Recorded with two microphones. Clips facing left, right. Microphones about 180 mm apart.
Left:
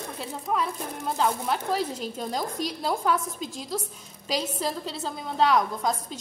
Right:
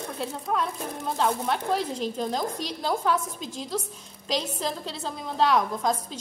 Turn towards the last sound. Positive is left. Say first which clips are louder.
# even
turn(degrees=0)  # may be behind; listen again after turning